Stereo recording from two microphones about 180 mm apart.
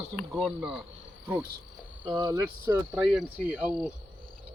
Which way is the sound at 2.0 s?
25° right (ahead or behind).